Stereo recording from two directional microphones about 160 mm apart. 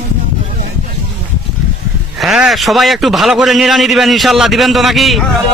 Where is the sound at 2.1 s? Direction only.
Centre (ahead or behind).